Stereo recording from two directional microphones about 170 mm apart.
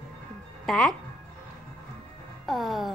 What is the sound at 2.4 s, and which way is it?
Music, centre (ahead or behind).